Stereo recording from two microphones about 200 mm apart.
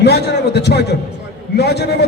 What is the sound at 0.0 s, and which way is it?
A man's voice, 55° left (ahead or behind).